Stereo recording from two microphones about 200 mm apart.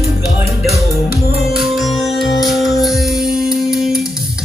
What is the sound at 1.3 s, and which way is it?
Music, 50° left (ahead or behind).